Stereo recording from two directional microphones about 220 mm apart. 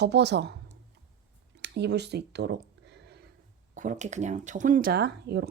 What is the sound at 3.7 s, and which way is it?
Speech, 35° right (ahead or behind).